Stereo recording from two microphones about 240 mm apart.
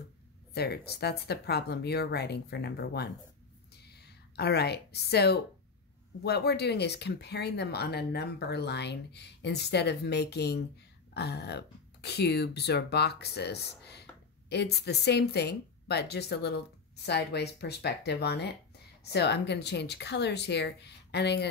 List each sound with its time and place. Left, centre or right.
0.6 s speech: left
4.4 s speech: left